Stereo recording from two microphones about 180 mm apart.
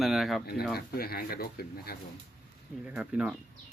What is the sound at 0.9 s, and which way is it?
Speech, 55° left (ahead or behind).